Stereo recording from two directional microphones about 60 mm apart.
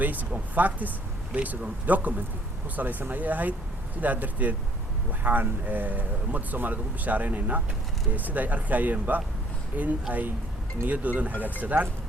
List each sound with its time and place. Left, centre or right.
0.0 s speech: right